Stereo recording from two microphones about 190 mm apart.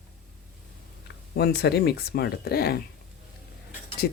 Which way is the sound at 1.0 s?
60° left (ahead or behind).